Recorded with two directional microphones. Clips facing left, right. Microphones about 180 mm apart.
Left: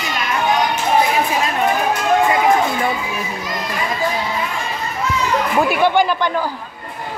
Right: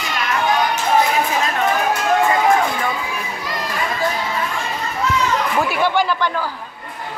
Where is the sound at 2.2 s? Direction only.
15° left (ahead or behind).